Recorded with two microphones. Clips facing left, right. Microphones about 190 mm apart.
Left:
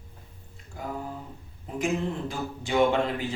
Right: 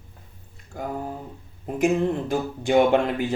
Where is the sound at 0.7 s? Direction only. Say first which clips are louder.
Right 4 dB; 50° right (ahead or behind).